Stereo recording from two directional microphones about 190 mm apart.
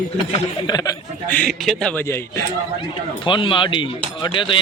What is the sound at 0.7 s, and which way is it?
Speech, 20° left (ahead or behind).